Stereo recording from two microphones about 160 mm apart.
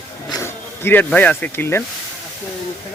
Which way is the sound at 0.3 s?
20° left (ahead or behind).